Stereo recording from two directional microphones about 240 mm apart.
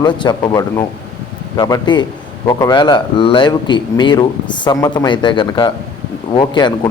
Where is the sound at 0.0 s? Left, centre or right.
Centre.